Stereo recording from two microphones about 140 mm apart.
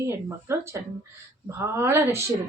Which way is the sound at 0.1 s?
20° right (ahead or behind).